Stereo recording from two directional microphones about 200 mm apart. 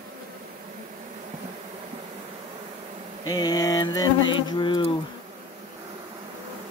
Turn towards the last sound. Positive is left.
turn(degrees=25)  # may be behind; listen again after turning